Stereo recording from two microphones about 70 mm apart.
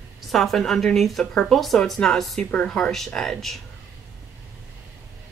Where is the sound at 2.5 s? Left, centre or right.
Centre.